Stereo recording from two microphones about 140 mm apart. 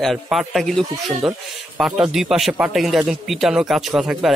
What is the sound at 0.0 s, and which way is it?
Speech, centre (ahead or behind).